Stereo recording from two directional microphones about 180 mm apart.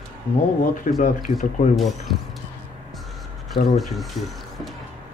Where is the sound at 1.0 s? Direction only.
45° left (ahead or behind).